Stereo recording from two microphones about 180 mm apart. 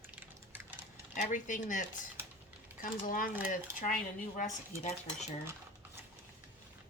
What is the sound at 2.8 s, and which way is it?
Speech, 50° left (ahead or behind).